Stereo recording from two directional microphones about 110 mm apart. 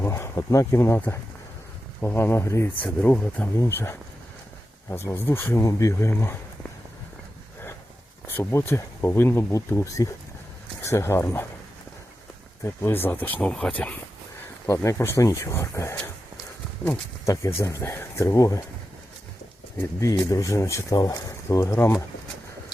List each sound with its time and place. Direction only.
0.0 s speech: 25° left (ahead or behind)
2.8 s speech: 10° left (ahead or behind)
8.4 s speech: 20° left (ahead or behind)
12.6 s speech: 20° left (ahead or behind)
14.7 s speech: 25° left (ahead or behind)
20.0 s speech: 30° left (ahead or behind)